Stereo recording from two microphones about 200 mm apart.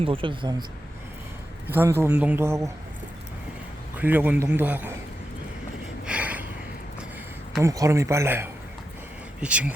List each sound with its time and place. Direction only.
0.0 s speech: 25° right (ahead or behind)
1.6 s a man's voice: 10° right (ahead or behind)
3.9 s a man's voice: 10° right (ahead or behind)
6.1 s a sound: 5° right (ahead or behind)
7.6 s a man's voice: 15° right (ahead or behind)